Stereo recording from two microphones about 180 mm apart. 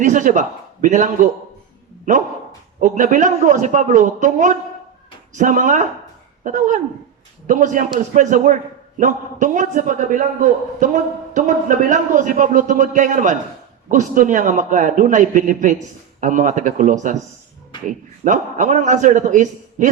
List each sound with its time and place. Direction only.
0.0 s a man's voice: 45° right (ahead or behind)
2.8 s a man's voice: 45° right (ahead or behind)